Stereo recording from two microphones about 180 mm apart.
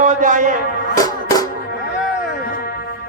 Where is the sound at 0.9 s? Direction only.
20° left (ahead or behind).